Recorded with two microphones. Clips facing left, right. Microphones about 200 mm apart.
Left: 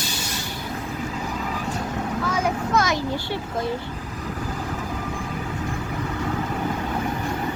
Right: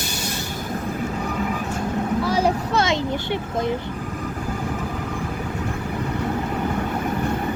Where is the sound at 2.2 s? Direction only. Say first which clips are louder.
Right 2 dB; 30° right (ahead or behind).